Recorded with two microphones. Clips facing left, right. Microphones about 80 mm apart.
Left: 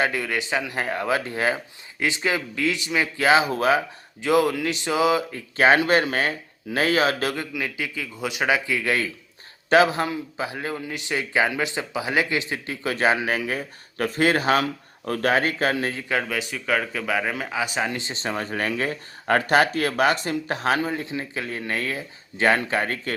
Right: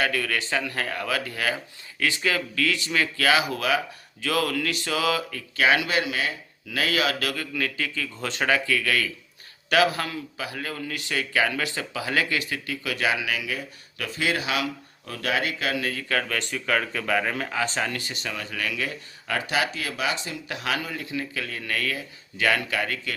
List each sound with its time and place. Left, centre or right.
0.0 s a man's voice: left
7.5 s a man's voice: centre; by 23.1 s left